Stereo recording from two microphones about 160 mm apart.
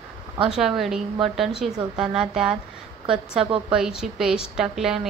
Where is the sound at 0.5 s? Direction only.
Centre (ahead or behind).